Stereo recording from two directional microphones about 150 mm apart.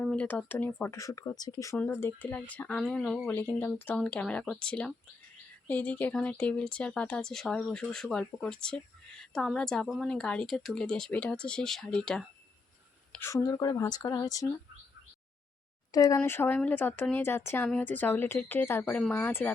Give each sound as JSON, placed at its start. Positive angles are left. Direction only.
{"t": 0.0, "sound": "a woman's voice", "side_deg": 5}
{"t": 13.1, "sound": "speech", "side_deg": 20}
{"t": 15.9, "sound": "speech", "side_deg": 25}